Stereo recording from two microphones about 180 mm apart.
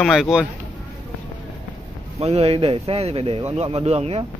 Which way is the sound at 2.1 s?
35° right (ahead or behind).